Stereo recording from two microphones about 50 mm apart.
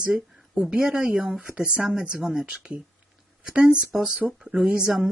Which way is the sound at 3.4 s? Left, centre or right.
Centre.